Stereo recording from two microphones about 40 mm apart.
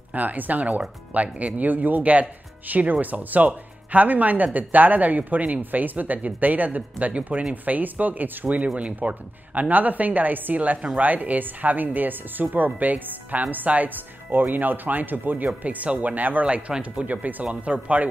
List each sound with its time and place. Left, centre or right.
0.1 s a woman's voice: right
16.4 s speech: right
17.1 s speech: right